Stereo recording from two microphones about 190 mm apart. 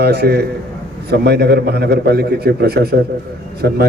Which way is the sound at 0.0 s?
55° right (ahead or behind).